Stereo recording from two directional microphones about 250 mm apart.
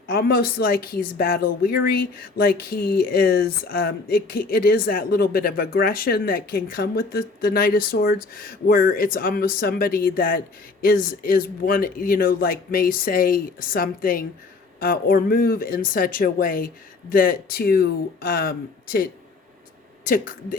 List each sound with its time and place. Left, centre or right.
0.1 s speech: left
20.1 s speech: left